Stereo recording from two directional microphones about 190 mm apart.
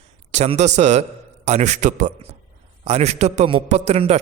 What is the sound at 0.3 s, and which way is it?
A man's voice, 35° right (ahead or behind).